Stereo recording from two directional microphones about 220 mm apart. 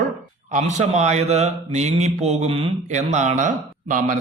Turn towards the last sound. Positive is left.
turn(degrees=-35)  # may be behind; listen again after turning